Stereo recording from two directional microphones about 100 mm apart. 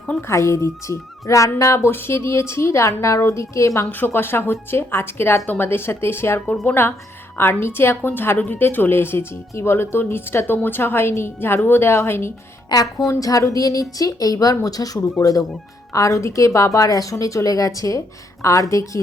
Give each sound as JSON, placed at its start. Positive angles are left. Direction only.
{"t": 0.2, "sound": "a woman's voice", "side_deg": 30}
{"t": 12.7, "sound": "a woman's voice", "side_deg": 45}